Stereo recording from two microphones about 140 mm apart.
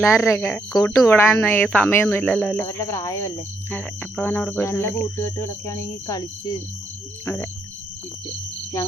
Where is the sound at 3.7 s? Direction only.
5° left (ahead or behind); by 6.6 s 25° left (ahead or behind).